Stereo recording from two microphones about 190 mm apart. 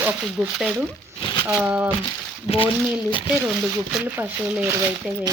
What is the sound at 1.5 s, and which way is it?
Speech, 5° right (ahead or behind).